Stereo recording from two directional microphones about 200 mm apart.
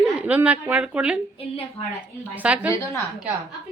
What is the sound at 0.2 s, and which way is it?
A woman's voice, 10° right (ahead or behind).